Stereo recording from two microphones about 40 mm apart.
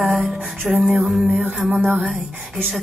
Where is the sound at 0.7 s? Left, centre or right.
Centre.